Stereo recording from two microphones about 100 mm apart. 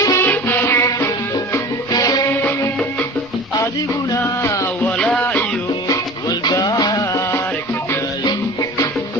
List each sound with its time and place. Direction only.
0.0 s music: 30° left (ahead or behind)
0.3 s music: 20° left (ahead or behind)
1.9 s music: 40° left (ahead or behind)
4.9 s music: 15° left (ahead or behind)
6.4 s music: 40° left (ahead or behind)